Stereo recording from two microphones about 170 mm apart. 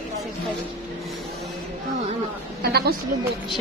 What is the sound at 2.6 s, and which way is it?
Speech, 65° right (ahead or behind).